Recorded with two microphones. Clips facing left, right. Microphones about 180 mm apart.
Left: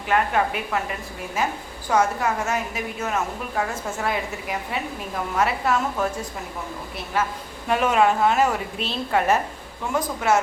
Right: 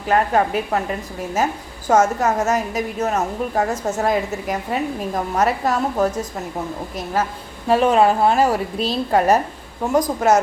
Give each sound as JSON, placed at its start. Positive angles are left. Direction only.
{"t": 0.1, "sound": "a woman's voice", "side_deg": -40}